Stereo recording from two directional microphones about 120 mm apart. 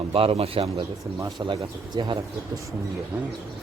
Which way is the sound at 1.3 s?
40° right (ahead or behind).